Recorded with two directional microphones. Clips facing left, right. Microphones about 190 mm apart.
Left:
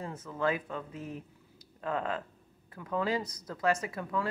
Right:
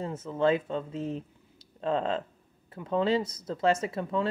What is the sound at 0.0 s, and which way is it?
Speech, 25° right (ahead or behind).